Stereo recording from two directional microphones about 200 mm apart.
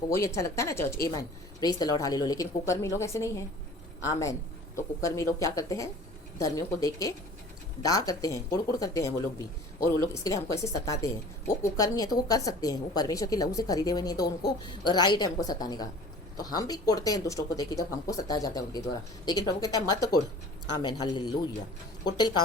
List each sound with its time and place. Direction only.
0.3 s speech: 15° left (ahead or behind)